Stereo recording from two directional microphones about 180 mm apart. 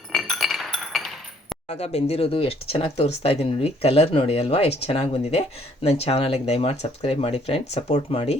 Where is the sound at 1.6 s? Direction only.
35° left (ahead or behind).